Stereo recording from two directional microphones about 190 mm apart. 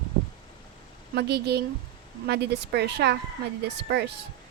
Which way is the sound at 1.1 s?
60° right (ahead or behind).